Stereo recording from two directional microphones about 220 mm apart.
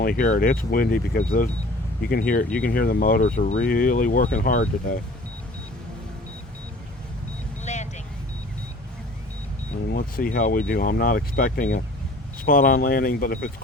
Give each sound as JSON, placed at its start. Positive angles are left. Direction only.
{"t": 0.0, "sound": "speech", "side_deg": 40}
{"t": 7.6, "sound": "vehicle", "side_deg": 30}
{"t": 9.9, "sound": "speech", "side_deg": 40}